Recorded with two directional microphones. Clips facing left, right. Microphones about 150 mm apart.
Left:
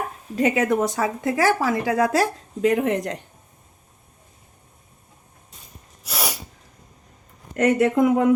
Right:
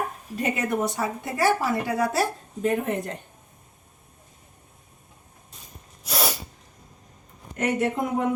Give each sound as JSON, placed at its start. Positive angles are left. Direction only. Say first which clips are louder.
{"t": 0.3, "sound": "speech", "louder": "left 6 dB", "side_deg": 90}
{"t": 6.1, "sound": "sneeze", "louder": "right 2 dB", "side_deg": 10}
{"t": 7.5, "sound": "speech", "louder": "left 6 dB", "side_deg": 90}